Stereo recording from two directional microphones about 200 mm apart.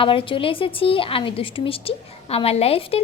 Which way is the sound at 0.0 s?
25° left (ahead or behind).